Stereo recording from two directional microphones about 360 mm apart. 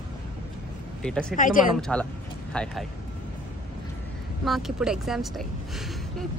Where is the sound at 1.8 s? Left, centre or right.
Centre.